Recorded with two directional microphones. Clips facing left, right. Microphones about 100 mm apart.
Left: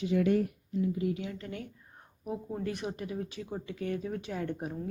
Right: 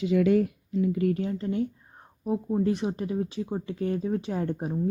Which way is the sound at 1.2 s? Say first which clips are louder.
Right 11 dB; 30° right (ahead or behind).